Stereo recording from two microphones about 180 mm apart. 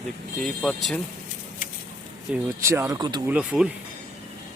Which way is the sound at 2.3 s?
15° right (ahead or behind).